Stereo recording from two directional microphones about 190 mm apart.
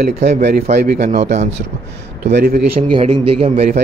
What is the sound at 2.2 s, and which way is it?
Speech, 60° right (ahead or behind).